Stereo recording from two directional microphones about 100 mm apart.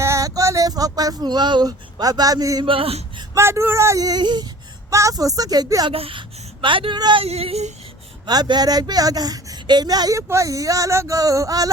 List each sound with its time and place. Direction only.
0.0 s a sound: 30° right (ahead or behind)
2.6 s speech: 70° right (ahead or behind)
3.3 s speech: 25° right (ahead or behind); by 4.4 s 45° right (ahead or behind)
4.9 s speech: 30° right (ahead or behind)
5.9 s speech: 65° right (ahead or behind); by 7.2 s 50° right (ahead or behind)
7.2 s speech: 80° right
8.3 s speech: 45° right (ahead or behind)